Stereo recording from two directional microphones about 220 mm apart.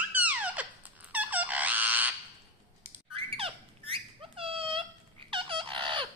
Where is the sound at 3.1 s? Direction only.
25° right (ahead or behind).